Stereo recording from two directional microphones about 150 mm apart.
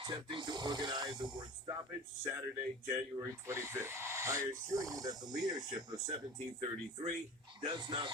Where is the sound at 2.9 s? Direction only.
20° right (ahead or behind).